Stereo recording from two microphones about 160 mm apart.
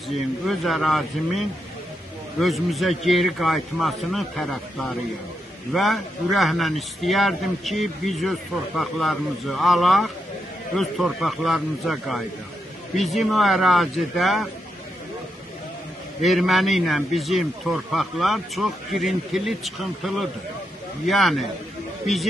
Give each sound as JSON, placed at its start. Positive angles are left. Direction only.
{"t": 0.5, "sound": "a man's voice", "side_deg": 0}
{"t": 2.4, "sound": "a man's voice", "side_deg": 0}
{"t": 16.2, "sound": "a man's voice", "side_deg": 0}